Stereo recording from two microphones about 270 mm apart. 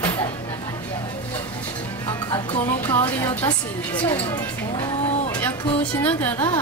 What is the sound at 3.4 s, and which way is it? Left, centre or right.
Speech, centre.